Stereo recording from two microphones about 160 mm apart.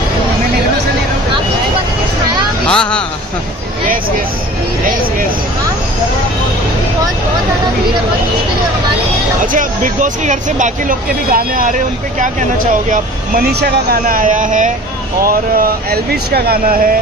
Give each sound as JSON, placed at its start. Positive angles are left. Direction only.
{"t": 2.6, "sound": "speech", "side_deg": 5}
{"t": 9.5, "sound": "speech", "side_deg": -55}
{"t": 13.5, "sound": "speech", "side_deg": -85}
{"t": 15.2, "sound": "speech", "side_deg": -65}